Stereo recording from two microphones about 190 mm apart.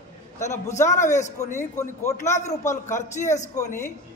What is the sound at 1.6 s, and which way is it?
A man's voice, 15° left (ahead or behind).